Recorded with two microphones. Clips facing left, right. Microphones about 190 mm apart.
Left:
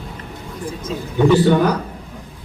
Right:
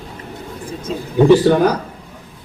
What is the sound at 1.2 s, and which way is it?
Speech, 40° right (ahead or behind).